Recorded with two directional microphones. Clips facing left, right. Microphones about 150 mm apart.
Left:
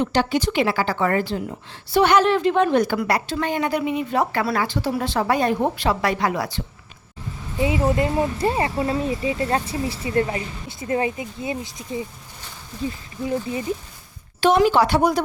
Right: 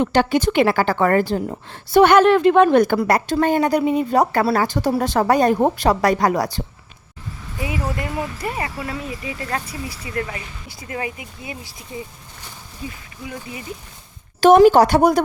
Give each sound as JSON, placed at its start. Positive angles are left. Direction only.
{"t": 0.0, "sound": "a woman's voice", "side_deg": -55}
{"t": 7.6, "sound": "speech", "side_deg": 25}
{"t": 13.2, "sound": "speech", "side_deg": 35}
{"t": 14.4, "sound": "a woman's voice", "side_deg": -45}